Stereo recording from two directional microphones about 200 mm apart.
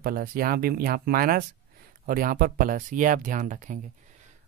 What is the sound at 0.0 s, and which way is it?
Speech, 45° right (ahead or behind).